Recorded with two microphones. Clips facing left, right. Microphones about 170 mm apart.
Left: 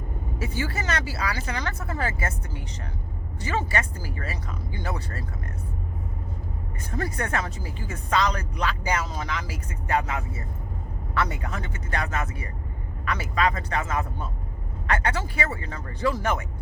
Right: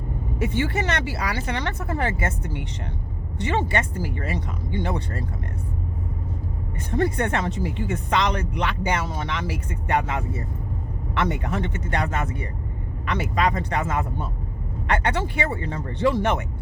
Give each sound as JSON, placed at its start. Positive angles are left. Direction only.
{"t": 0.4, "sound": "speech", "side_deg": -25}
{"t": 6.9, "sound": "speech", "side_deg": -30}
{"t": 13.7, "sound": "speech", "side_deg": -25}